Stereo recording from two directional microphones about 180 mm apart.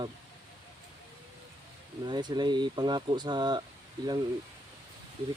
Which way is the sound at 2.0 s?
25° right (ahead or behind).